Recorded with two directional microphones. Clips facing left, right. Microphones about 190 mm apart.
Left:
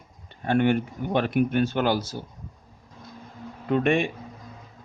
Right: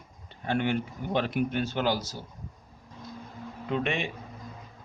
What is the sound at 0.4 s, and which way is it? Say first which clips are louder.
Speech: left 6 dB; 55° left (ahead or behind).